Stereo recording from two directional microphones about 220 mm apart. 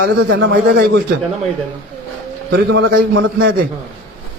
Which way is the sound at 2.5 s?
55° right (ahead or behind).